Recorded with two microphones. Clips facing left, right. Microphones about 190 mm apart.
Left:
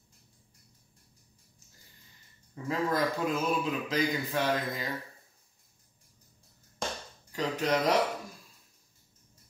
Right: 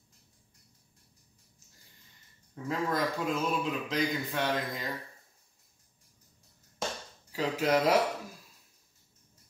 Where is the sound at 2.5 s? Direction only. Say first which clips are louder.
Left 1 dB; centre (ahead or behind).